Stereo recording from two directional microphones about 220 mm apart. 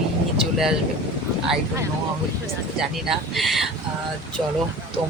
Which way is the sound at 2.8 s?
Centre (ahead or behind).